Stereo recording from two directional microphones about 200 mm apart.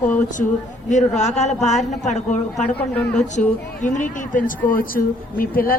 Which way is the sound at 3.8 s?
40° left (ahead or behind).